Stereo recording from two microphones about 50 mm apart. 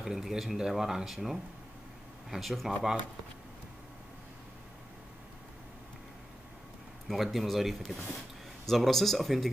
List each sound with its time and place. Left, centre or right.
0.0 s speech: centre
7.1 s speech: centre